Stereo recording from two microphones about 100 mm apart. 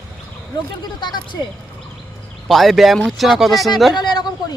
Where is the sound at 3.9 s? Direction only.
45° left (ahead or behind).